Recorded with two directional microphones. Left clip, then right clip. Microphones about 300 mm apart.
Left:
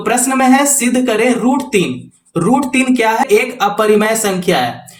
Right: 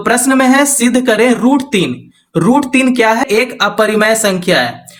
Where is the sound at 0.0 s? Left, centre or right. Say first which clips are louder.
Right 2 dB; right.